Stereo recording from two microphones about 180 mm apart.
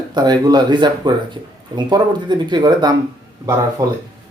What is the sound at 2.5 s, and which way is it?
Speech, 25° right (ahead or behind).